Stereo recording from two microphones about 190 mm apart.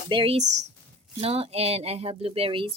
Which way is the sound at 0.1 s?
30° right (ahead or behind).